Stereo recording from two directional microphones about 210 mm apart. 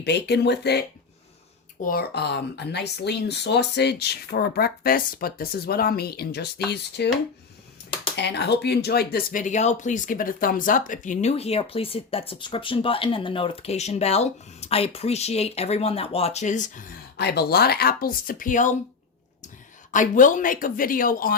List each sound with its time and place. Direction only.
0.0 s speech: 55° left (ahead or behind)
8.1 s speech: 55° left (ahead or behind); by 16.8 s 35° left (ahead or behind)
17.2 s speech: 50° left (ahead or behind)
19.9 s speech: 40° left (ahead or behind)